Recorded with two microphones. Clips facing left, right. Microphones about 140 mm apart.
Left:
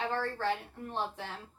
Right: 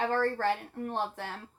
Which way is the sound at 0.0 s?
50° right (ahead or behind).